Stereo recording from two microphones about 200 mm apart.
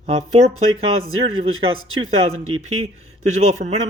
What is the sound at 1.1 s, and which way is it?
Speech, 90° right.